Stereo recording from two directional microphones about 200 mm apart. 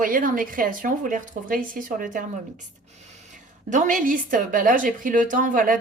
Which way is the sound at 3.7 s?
40° right (ahead or behind).